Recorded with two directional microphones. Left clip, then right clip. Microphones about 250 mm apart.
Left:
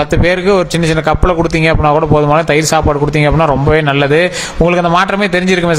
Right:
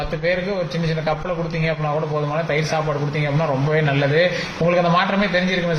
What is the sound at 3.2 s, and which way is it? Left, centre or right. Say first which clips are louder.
A man's voice: left 11 dB; left.